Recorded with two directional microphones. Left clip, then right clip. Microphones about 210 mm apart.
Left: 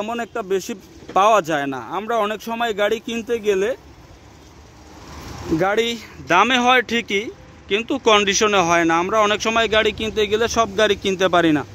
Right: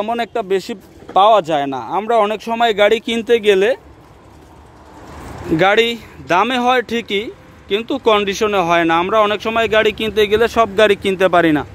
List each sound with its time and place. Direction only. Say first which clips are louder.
0.0 s speech: right 6 dB; 5° right (ahead or behind)
5.6 s speech: right 7 dB; 5° right (ahead or behind)